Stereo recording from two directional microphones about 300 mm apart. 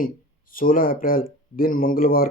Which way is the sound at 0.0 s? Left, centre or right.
Left.